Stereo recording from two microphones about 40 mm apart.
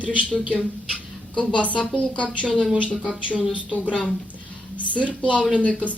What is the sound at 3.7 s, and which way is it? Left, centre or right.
Speech, left.